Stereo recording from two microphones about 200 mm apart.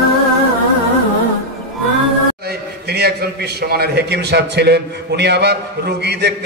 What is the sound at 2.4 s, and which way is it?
A man's voice, 55° right (ahead or behind).